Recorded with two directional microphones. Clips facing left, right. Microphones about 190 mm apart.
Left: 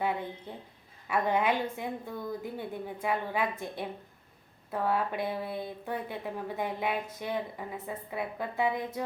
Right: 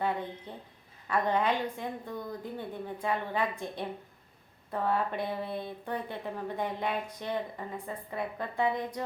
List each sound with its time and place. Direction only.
0.5 s a woman's voice: 10° left (ahead or behind)